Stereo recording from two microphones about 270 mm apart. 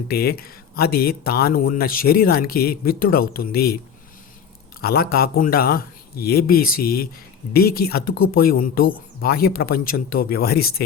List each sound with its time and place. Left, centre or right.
0.1 s speech: left
4.8 s speech: left